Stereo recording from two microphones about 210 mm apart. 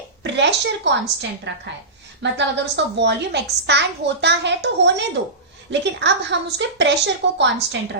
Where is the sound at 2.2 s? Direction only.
55° right (ahead or behind).